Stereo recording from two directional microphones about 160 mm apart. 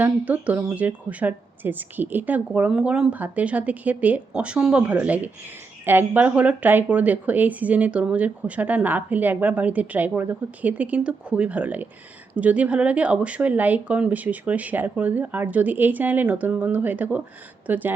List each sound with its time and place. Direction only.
0.0 s speech: 10° right (ahead or behind)